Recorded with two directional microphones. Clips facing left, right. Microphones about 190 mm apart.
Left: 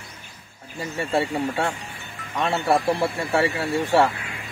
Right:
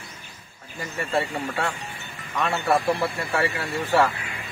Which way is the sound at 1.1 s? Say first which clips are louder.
Left 3 dB; 30° left (ahead or behind).